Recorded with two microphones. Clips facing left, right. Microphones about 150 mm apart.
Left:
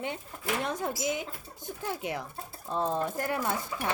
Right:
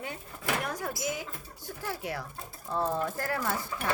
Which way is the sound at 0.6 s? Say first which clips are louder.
Left 2 dB; 25° left (ahead or behind).